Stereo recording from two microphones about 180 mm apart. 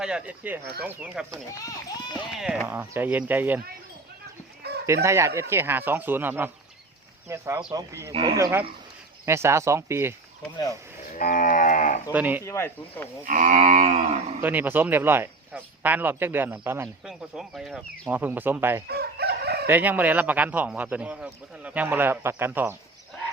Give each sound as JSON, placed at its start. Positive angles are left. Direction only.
{"t": 0.0, "sound": "speech", "side_deg": -5}
{"t": 2.3, "sound": "speech", "side_deg": 0}
{"t": 4.6, "sound": "chicken", "side_deg": -65}
{"t": 5.0, "sound": "speech", "side_deg": -15}
{"t": 9.2, "sound": "speech", "side_deg": -15}
{"t": 11.1, "sound": "livestock", "side_deg": 50}
{"t": 12.1, "sound": "speech", "side_deg": -10}
{"t": 12.5, "sound": "speech", "side_deg": 15}
{"t": 13.2, "sound": "moo", "side_deg": -45}
{"t": 14.4, "sound": "speech", "side_deg": -10}
{"t": 18.9, "sound": "crowing", "side_deg": -60}
{"t": 19.6, "sound": "speech", "side_deg": -10}